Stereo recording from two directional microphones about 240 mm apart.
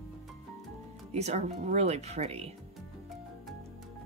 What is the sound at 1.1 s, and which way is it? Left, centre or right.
Speech, right.